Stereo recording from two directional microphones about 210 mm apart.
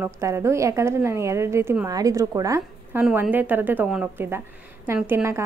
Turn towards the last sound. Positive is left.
turn(degrees=-10)  # may be behind; listen again after turning